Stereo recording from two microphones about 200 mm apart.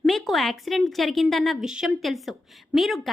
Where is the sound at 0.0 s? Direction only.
Centre (ahead or behind).